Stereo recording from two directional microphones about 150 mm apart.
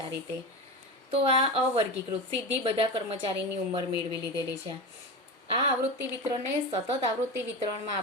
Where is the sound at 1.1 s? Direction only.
40° right (ahead or behind).